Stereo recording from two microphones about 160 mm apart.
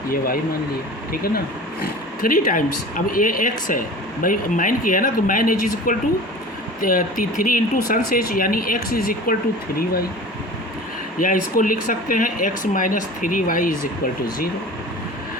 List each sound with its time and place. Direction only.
1.1 s speech: 70° left (ahead or behind)
11.2 s speech: 60° left (ahead or behind)